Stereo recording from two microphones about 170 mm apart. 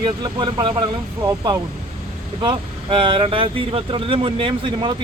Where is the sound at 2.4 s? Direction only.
30° right (ahead or behind).